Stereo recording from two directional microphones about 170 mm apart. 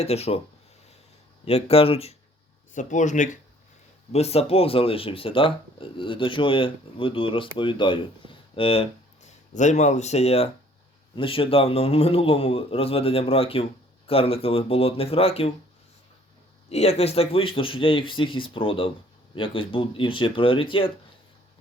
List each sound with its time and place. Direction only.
0.0 s speech: 40° left (ahead or behind)
1.5 s speech: 35° left (ahead or behind)
16.6 s speech: 40° left (ahead or behind)